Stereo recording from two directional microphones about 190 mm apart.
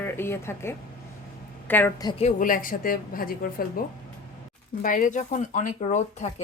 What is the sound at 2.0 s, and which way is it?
Speech, 30° left (ahead or behind).